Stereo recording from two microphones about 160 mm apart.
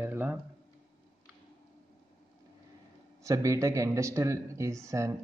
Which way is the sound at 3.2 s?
20° right (ahead or behind).